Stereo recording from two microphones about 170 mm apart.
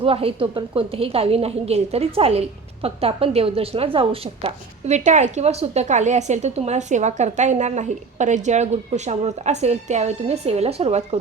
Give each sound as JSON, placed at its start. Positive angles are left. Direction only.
{"t": 0.0, "sound": "a woman's voice", "side_deg": -35}